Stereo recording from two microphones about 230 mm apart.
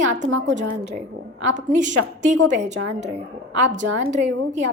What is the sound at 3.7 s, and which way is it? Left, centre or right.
Speech, right.